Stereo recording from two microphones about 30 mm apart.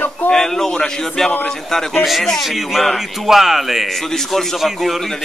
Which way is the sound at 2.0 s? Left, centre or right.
Centre.